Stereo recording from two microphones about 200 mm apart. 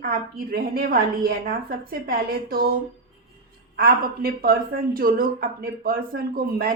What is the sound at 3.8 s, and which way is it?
A woman's voice, 50° right (ahead or behind).